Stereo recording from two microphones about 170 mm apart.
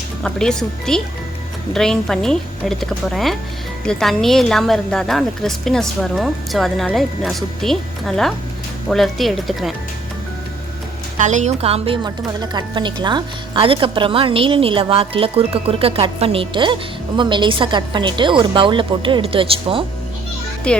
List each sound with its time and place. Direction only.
0.2 s a woman's voice: 5° left (ahead or behind)
11.2 s a woman's voice: 45° right (ahead or behind)
20.7 s a child's voice: 5° left (ahead or behind)